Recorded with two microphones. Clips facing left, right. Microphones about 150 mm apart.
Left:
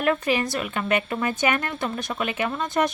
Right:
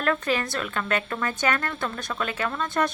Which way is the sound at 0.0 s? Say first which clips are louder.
Left 3 dB; 15° left (ahead or behind).